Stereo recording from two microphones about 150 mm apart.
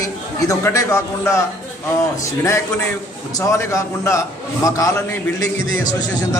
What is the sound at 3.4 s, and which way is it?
A man's voice, 20° left (ahead or behind).